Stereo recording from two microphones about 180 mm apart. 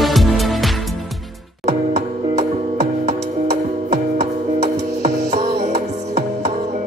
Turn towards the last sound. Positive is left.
turn(degrees=-40)  # may be behind; listen again after turning